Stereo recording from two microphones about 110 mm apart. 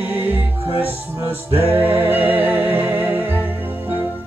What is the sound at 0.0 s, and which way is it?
Music, 20° right (ahead or behind).